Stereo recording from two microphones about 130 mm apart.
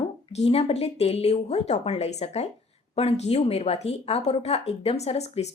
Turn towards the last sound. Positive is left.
turn(degrees=55)  # may be behind; listen again after turning